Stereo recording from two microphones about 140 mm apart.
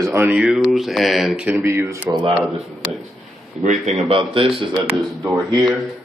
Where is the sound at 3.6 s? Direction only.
60° right (ahead or behind).